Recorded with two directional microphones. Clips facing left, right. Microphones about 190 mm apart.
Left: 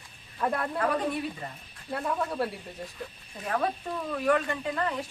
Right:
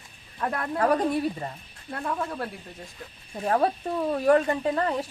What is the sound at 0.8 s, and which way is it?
Speech, 40° right (ahead or behind).